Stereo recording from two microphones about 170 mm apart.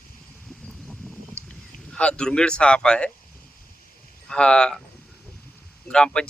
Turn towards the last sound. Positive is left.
turn(degrees=5)  # may be behind; listen again after turning